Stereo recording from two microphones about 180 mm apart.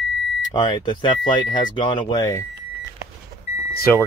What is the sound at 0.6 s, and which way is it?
Speech, 25° left (ahead or behind).